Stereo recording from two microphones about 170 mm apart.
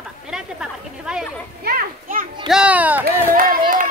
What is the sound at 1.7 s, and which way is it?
Children playing, 55° right (ahead or behind).